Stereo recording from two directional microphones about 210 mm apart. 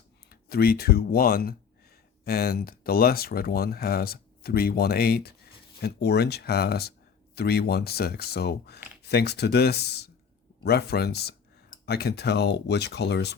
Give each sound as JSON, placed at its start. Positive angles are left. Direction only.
{"t": 0.3, "sound": "speech", "side_deg": 45}